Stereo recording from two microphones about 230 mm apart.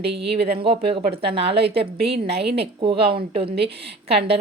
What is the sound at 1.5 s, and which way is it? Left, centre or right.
A woman's voice, right.